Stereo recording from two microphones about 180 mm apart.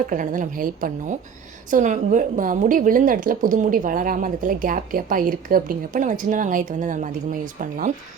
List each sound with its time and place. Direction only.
0.1 s a woman's voice: 50° right (ahead or behind)